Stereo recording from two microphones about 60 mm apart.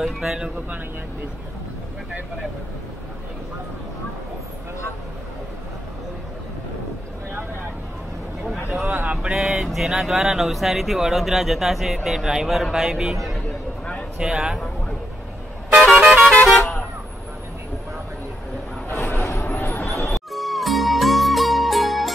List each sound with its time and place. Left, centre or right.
0.0 s a man's voice: centre
8.5 s a sound: centre
8.8 s speech: right
9.3 s a man's voice: centre
14.2 s a man's voice: centre
15.7 s vehicle: centre
18.9 s a sound: left
20.3 s music: centre